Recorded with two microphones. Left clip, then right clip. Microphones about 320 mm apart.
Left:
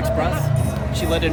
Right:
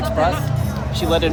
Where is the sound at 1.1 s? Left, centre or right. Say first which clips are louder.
Right 4 dB; centre.